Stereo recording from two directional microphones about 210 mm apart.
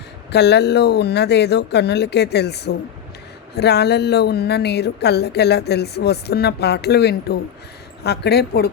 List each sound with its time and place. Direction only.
0.3 s speech: 55° left (ahead or behind)